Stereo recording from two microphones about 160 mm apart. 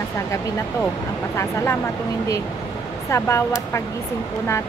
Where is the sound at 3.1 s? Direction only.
15° left (ahead or behind).